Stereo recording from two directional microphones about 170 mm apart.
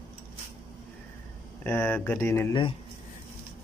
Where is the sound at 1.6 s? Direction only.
10° left (ahead or behind).